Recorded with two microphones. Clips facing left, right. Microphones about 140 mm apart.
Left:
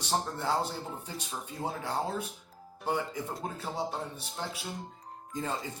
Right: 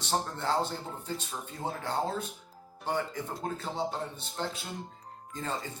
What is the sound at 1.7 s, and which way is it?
Speech, 5° left (ahead or behind).